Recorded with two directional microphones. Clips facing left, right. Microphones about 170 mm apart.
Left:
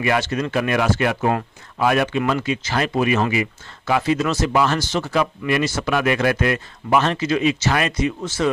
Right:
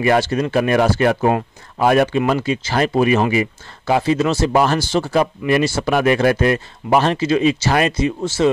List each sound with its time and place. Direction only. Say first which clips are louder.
0.0 s speech: right 5 dB; 35° right (ahead or behind)